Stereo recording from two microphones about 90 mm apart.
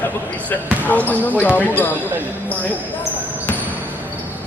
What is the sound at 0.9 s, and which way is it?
Speech, 20° left (ahead or behind).